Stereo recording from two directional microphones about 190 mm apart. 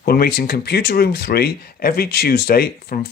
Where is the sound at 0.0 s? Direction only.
55° left (ahead or behind).